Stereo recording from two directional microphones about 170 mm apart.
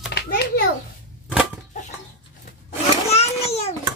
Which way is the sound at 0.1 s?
75° left (ahead or behind).